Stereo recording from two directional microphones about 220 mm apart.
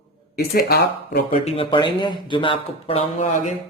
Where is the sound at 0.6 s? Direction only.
40° left (ahead or behind).